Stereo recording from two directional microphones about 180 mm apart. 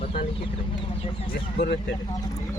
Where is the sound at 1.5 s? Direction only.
65° left (ahead or behind).